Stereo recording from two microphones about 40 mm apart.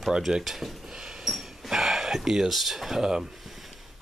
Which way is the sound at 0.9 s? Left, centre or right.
Centre.